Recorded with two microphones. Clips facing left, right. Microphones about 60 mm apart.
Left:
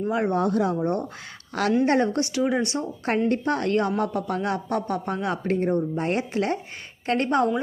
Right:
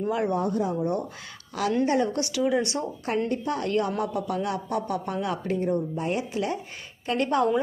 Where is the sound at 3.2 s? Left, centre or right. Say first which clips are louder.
Left 4 dB; left.